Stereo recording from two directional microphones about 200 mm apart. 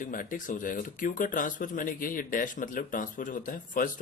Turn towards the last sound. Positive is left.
turn(degrees=45)  # may be behind; listen again after turning